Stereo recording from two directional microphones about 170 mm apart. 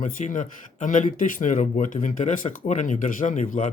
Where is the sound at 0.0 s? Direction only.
50° left (ahead or behind).